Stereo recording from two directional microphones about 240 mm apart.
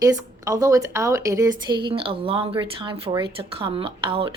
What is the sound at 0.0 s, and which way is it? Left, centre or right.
A woman's voice, centre.